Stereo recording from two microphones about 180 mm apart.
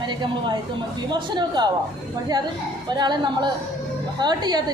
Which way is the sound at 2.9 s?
25° right (ahead or behind).